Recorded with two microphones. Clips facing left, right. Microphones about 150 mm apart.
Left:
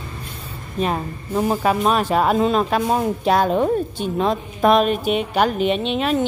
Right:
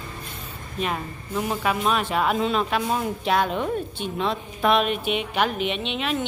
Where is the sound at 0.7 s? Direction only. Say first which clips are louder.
Left 6 dB; 35° left (ahead or behind).